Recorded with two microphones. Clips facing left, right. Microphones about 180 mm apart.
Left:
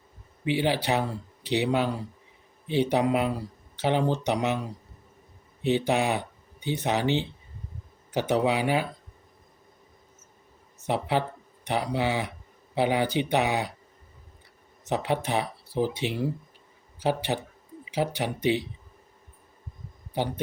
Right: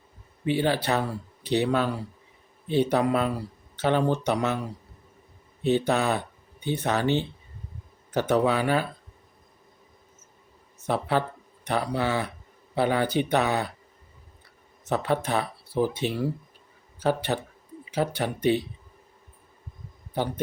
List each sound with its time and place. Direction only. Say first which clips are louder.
0.4 s speech: right 1 dB; 15° left (ahead or behind)
5.6 s speech: right 1 dB; 15° left (ahead or behind)
10.8 s speech: right 1 dB; 15° left (ahead or behind)
14.8 s speech: right 1 dB; 15° left (ahead or behind)